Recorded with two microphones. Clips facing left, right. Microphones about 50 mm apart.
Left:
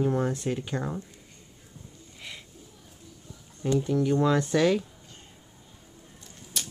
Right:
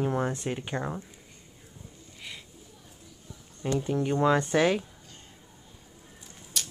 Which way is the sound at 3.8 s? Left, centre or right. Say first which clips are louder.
Right 1 dB; right.